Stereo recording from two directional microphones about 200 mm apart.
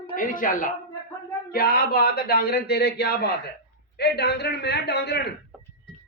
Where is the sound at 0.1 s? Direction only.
45° left (ahead or behind).